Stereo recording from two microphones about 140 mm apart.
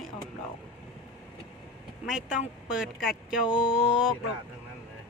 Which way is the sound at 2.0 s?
5° right (ahead or behind).